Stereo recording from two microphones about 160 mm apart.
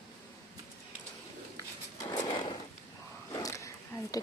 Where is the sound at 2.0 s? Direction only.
30° left (ahead or behind).